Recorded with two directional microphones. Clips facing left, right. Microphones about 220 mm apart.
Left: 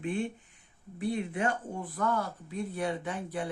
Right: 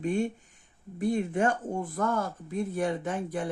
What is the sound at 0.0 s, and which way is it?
Speech, 40° right (ahead or behind).